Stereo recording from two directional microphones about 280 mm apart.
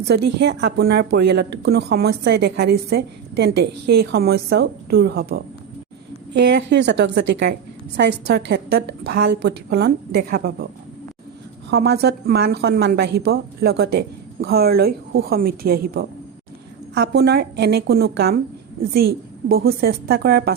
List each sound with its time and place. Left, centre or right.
0.1 s speech: right
11.7 s speech: right